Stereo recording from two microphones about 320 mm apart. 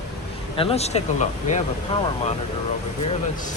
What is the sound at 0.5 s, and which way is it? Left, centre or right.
Speech, centre.